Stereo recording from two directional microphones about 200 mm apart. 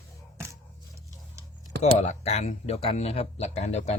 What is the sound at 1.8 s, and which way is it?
Speech, 35° left (ahead or behind).